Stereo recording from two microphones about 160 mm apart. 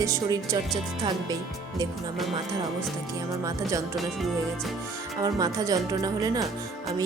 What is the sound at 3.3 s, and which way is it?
Speech, 20° right (ahead or behind).